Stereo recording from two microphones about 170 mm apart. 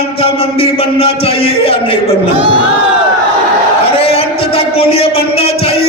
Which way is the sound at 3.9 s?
35° left (ahead or behind).